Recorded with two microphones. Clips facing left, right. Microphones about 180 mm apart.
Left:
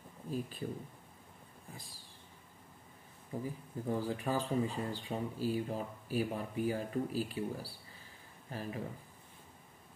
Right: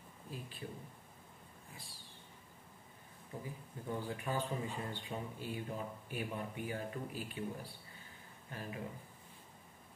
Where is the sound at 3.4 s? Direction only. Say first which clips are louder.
Left 8 dB; 40° left (ahead or behind).